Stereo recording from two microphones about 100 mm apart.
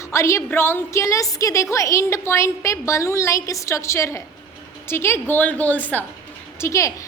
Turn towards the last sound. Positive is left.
turn(degrees=30)  # may be behind; listen again after turning